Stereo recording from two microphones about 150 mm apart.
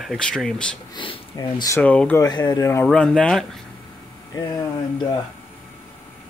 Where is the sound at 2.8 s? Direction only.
5° left (ahead or behind).